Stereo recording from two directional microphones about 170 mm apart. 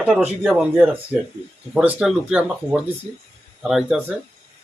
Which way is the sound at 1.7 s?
5° right (ahead or behind).